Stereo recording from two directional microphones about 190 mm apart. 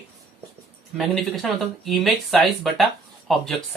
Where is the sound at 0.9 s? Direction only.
Centre (ahead or behind).